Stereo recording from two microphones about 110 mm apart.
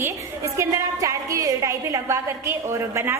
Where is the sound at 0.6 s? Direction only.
30° right (ahead or behind).